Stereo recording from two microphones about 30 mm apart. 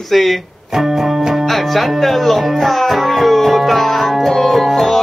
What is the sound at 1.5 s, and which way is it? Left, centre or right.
Music, centre.